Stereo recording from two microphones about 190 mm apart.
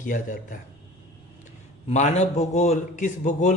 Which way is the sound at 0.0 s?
45° left (ahead or behind).